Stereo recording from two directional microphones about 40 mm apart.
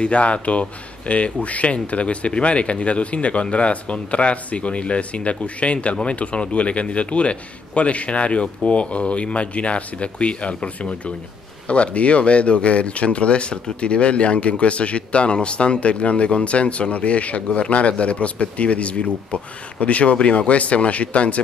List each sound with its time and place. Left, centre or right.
0.0 s speech: left